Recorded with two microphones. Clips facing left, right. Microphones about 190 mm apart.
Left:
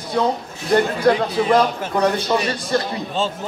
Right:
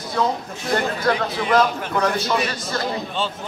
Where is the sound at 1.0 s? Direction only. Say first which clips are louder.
Left 5 dB; 30° left (ahead or behind).